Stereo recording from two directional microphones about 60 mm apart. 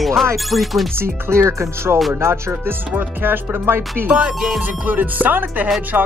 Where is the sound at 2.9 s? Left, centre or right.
Right.